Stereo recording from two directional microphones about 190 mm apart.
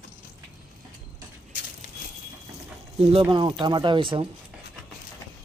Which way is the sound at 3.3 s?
25° right (ahead or behind).